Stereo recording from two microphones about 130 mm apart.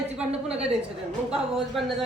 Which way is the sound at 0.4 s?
5° right (ahead or behind).